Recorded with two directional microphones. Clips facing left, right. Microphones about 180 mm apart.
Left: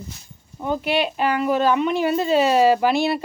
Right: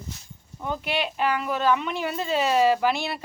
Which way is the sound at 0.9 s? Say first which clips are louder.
Left 4 dB; 35° left (ahead or behind).